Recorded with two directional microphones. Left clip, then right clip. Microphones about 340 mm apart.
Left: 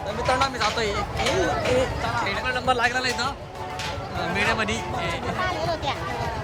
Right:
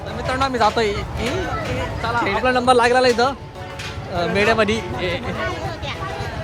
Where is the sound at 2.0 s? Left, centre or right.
Centre.